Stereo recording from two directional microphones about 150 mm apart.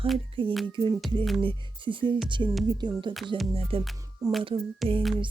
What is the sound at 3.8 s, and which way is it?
Music, centre (ahead or behind).